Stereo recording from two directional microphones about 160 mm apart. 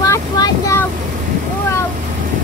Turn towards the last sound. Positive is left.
turn(degrees=20)  # may be behind; listen again after turning